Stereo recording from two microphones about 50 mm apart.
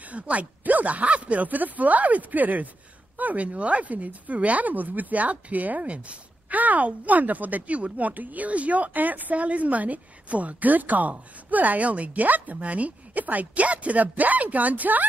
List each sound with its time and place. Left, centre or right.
0.0 s speech: right